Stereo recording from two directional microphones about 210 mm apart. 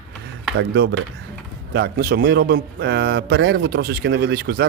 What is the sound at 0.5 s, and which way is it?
Speech, 55° right (ahead or behind).